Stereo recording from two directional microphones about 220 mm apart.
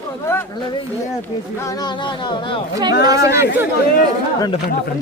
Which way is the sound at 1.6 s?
20° left (ahead or behind).